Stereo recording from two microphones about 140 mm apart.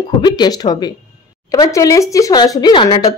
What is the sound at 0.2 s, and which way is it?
Speech, 30° left (ahead or behind).